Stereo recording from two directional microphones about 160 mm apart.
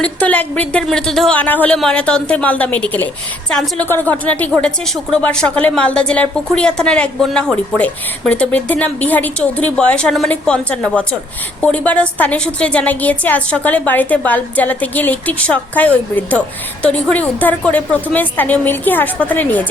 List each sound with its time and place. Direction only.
0.0 s a woman's voice: 10° left (ahead or behind)